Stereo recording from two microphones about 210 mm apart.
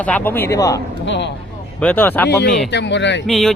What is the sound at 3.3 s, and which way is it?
Speech, centre (ahead or behind).